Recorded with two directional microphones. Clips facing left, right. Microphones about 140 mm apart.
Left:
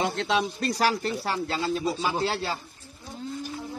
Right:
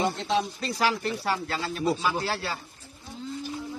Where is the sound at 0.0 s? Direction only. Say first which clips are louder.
Even; 80° left.